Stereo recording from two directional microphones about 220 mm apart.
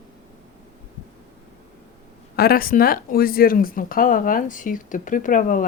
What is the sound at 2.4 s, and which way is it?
Speech, 45° left (ahead or behind).